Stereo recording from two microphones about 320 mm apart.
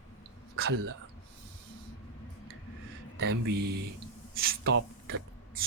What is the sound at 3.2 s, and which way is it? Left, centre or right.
Speech, right.